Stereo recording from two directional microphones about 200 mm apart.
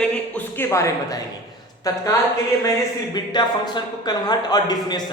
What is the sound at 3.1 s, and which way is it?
A man's voice, 20° left (ahead or behind).